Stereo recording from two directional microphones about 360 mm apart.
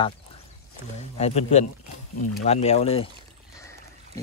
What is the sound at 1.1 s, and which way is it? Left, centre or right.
Speech, centre.